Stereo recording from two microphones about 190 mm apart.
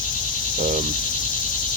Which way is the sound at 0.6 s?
45° right (ahead or behind).